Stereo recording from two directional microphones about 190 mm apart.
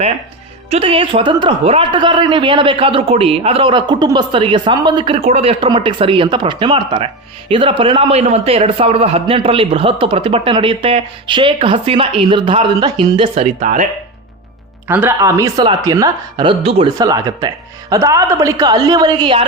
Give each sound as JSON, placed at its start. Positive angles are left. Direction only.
{"t": 0.7, "sound": "a man's voice", "side_deg": -30}
{"t": 14.8, "sound": "a man's voice", "side_deg": -10}
{"t": 17.0, "sound": "a man's voice", "side_deg": -15}